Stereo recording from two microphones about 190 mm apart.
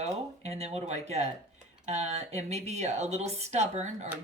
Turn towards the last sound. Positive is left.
turn(degrees=-35)  # may be behind; listen again after turning